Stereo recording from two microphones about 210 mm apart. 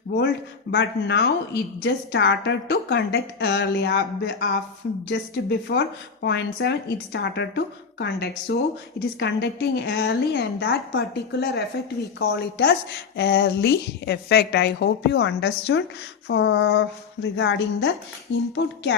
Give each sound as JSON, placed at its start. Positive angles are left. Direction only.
{"t": 0.7, "sound": "speech", "side_deg": 55}